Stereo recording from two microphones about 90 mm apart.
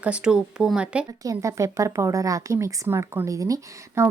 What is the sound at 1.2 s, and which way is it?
Speech, 35° right (ahead or behind).